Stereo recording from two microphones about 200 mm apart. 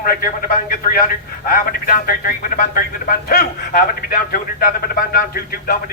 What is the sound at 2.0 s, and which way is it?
A man's voice, 45° left (ahead or behind).